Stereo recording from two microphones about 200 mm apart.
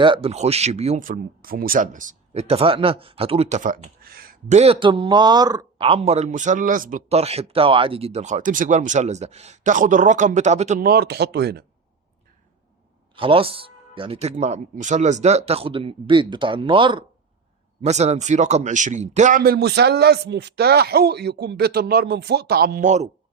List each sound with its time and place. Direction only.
0.0 s speech: 25° right (ahead or behind)
10.8 s speech: 50° right (ahead or behind)
13.1 s speech: 25° right (ahead or behind)